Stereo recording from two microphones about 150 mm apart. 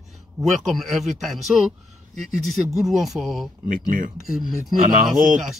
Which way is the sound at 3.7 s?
65° right (ahead or behind).